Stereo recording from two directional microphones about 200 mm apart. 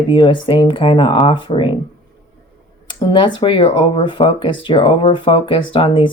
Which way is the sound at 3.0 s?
25° left (ahead or behind).